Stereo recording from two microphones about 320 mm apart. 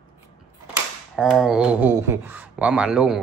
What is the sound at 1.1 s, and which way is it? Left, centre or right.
A man's voice, centre.